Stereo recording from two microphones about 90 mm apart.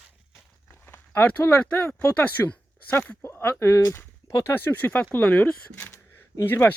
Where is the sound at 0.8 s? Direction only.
25° left (ahead or behind).